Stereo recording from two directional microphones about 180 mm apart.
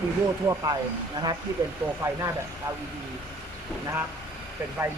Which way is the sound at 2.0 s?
20° right (ahead or behind).